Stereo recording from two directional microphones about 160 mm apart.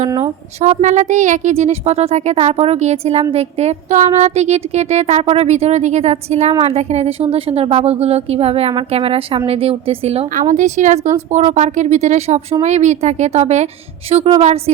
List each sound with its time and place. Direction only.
0.6 s a woman's voice: 50° right (ahead or behind)
10.5 s a woman's voice: 50° right (ahead or behind)